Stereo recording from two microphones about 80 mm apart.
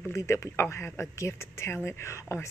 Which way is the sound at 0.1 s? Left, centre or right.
Left.